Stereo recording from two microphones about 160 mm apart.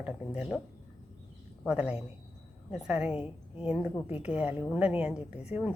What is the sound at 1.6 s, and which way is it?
A woman's voice, 5° right (ahead or behind).